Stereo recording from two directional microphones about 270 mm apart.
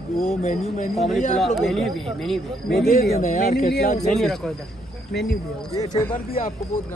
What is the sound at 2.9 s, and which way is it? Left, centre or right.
Speech, left.